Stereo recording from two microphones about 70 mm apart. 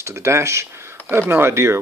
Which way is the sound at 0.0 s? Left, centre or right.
Right.